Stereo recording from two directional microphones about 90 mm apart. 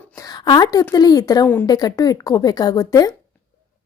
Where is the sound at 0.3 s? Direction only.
55° left (ahead or behind).